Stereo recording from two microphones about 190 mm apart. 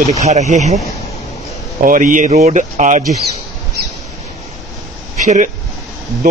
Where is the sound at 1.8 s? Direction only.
45° right (ahead or behind).